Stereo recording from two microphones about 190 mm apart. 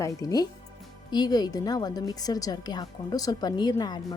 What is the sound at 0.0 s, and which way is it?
A woman's voice, 20° left (ahead or behind).